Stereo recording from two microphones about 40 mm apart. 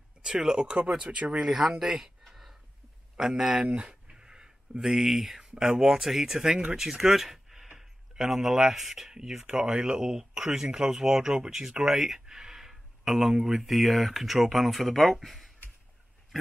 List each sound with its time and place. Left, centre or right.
0.2 s speech: centre; by 1.3 s right
1.3 s speech: centre
2.2 s a sound: centre
3.2 s speech: centre
3.5 s speech: right
4.1 s a sound: centre
5.6 s speech: centre